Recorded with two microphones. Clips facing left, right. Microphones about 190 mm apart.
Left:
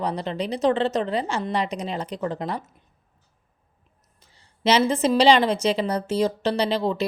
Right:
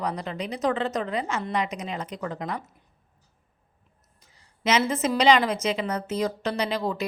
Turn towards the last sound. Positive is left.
turn(degrees=25)  # may be behind; listen again after turning